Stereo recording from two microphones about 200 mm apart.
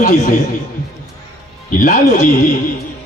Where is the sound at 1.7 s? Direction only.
40° left (ahead or behind).